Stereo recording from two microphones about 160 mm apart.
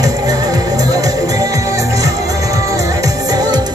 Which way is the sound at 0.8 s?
20° right (ahead or behind).